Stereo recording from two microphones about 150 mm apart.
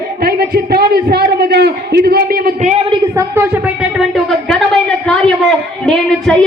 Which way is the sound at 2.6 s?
55° right (ahead or behind).